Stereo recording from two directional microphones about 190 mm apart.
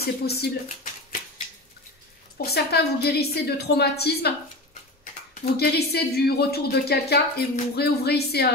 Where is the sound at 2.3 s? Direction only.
55° left (ahead or behind).